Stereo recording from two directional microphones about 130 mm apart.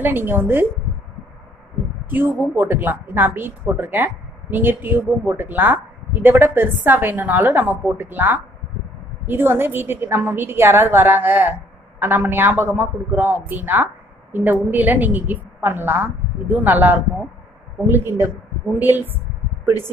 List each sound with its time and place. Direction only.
0.0 s a woman's voice: 15° right (ahead or behind)
2.0 s a woman's voice: 15° right (ahead or behind)